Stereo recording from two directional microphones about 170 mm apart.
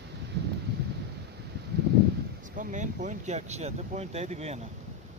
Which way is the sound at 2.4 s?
50° right (ahead or behind).